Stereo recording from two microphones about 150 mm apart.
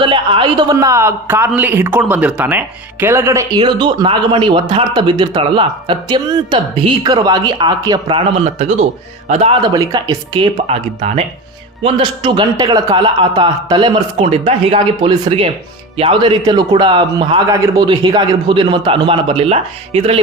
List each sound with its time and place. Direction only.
0.0 s a man's voice: 35° right (ahead or behind)
8.0 s speech: 40° right (ahead or behind)
9.6 s a man's voice: 25° right (ahead or behind)
10.3 s speech: 40° right (ahead or behind)